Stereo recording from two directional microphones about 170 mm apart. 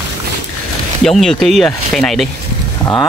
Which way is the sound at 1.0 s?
Centre (ahead or behind).